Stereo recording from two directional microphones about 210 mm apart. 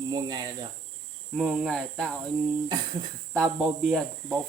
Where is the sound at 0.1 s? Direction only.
20° right (ahead or behind).